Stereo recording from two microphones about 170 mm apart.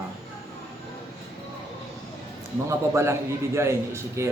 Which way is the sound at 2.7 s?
15° right (ahead or behind).